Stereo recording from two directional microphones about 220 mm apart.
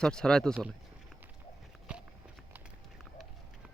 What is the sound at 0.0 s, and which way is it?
Speech, 5° left (ahead or behind).